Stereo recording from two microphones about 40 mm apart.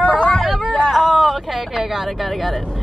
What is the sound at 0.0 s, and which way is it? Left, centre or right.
Hubbub, left.